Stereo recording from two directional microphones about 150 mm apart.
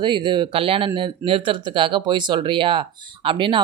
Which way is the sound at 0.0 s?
30° right (ahead or behind).